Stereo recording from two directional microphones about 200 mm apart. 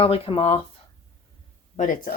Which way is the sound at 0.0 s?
30° left (ahead or behind).